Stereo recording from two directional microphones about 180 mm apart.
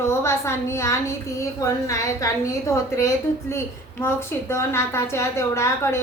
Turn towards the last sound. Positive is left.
turn(degrees=15)  # may be behind; listen again after turning